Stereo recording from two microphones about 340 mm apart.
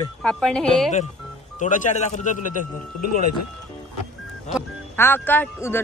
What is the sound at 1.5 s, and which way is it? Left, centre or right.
Speech, left.